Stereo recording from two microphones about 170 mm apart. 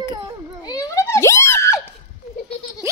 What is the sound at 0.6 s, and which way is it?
Screaming, 20° left (ahead or behind).